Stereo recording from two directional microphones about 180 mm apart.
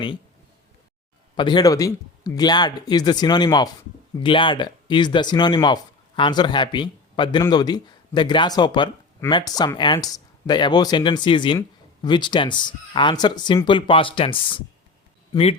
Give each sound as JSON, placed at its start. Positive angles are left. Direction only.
{"t": 1.4, "sound": "speech", "side_deg": 25}